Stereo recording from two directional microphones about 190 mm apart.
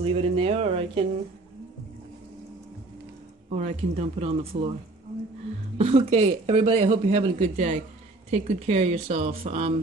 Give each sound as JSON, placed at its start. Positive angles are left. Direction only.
{"t": 0.0, "sound": "speech", "side_deg": -30}
{"t": 3.5, "sound": "speech", "side_deg": -35}
{"t": 5.8, "sound": "speech", "side_deg": -35}